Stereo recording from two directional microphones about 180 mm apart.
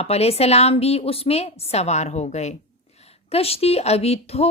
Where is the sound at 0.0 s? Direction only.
35° left (ahead or behind).